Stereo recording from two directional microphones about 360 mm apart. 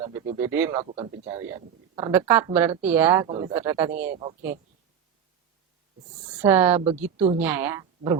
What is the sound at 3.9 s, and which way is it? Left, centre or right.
Speech, right.